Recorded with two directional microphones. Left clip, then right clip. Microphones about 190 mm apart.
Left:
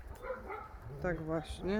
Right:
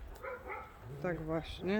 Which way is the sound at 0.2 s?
55° right (ahead or behind).